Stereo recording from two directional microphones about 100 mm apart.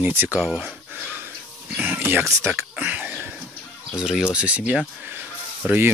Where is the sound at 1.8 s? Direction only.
20° right (ahead or behind).